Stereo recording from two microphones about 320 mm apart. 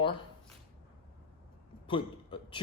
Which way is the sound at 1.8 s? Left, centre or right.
Centre.